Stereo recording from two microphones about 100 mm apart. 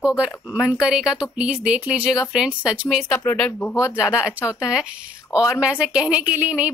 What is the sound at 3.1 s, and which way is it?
Speech, 10° left (ahead or behind).